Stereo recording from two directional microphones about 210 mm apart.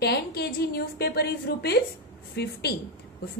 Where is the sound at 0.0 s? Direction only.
50° left (ahead or behind).